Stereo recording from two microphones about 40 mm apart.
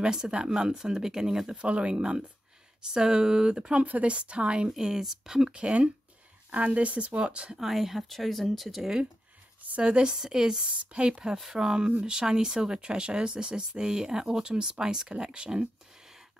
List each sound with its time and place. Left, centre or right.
0.0 s speech: right
1.6 s speech: right
3.8 s speech: right
4.6 s speech: centre
7.5 s speech: centre
8.1 s speech: centre
9.7 s speech: right
10.0 s speech: centre